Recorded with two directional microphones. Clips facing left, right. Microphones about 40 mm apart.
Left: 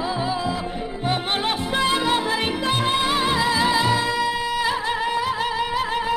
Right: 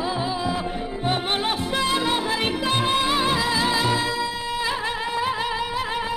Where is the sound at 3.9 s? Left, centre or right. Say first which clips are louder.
Left 3 dB; left.